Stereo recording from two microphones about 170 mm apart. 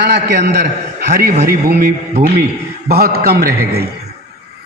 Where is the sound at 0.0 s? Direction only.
75° right (ahead or behind).